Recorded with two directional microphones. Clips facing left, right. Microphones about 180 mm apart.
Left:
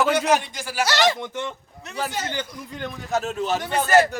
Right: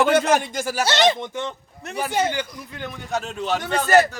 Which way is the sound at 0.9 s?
20° right (ahead or behind).